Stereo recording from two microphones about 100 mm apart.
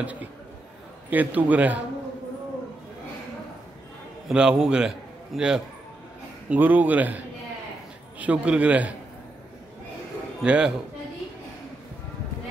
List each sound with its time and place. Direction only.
0.0 s a man's voice: 15° right (ahead or behind)
4.3 s a man's voice: 5° right (ahead or behind)
6.5 s a man's voice: 15° right (ahead or behind)
10.4 s a man's voice: 10° right (ahead or behind)